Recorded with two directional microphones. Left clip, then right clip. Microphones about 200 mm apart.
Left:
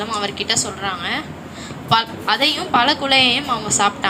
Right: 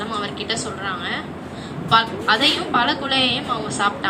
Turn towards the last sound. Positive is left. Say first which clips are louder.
# left 3 dB
turn(degrees=55)  # may be behind; listen again after turning